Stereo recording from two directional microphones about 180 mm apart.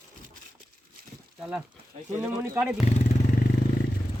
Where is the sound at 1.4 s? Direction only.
5° right (ahead or behind).